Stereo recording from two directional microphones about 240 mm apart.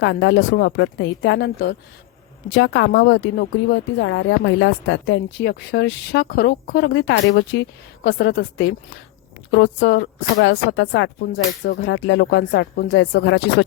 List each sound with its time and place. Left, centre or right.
0.0 s speech: left